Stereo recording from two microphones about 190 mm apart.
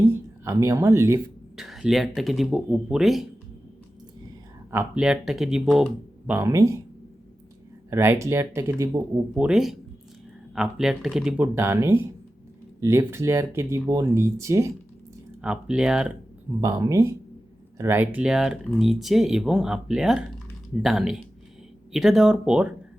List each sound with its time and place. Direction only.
0.1 s speech: 15° right (ahead or behind)
1.5 s speech: centre (ahead or behind)
4.7 s speech: 10° right (ahead or behind)
7.9 s speech: 15° right (ahead or behind)
15.4 s speech: 5° right (ahead or behind)
16.6 s speech: 15° right (ahead or behind)